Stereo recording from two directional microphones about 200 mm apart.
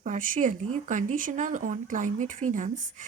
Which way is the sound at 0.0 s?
40° right (ahead or behind).